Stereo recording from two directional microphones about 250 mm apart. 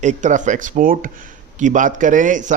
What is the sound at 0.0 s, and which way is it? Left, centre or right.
A man's voice, right.